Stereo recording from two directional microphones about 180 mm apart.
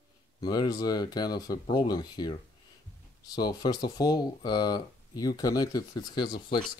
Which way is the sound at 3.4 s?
25° left (ahead or behind).